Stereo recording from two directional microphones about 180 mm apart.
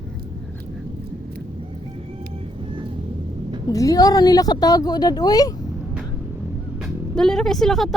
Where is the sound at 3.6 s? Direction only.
20° left (ahead or behind).